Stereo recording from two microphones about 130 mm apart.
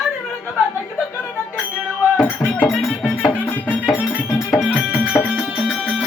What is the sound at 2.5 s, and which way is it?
Music, 20° left (ahead or behind).